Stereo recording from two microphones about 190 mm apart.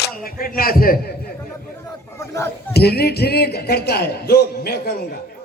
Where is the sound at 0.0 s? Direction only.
50° left (ahead or behind).